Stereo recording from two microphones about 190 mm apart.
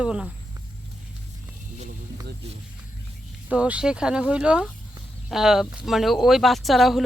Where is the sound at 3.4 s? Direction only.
5° right (ahead or behind).